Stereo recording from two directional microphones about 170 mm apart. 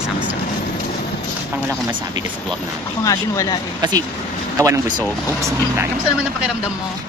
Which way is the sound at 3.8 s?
20° right (ahead or behind).